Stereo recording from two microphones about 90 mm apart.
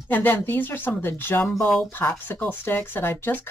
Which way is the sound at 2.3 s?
25° left (ahead or behind).